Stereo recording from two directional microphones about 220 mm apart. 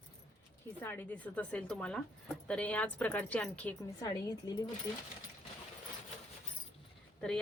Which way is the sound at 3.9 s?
15° left (ahead or behind).